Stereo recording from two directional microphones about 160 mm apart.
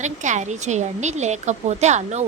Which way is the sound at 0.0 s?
50° right (ahead or behind).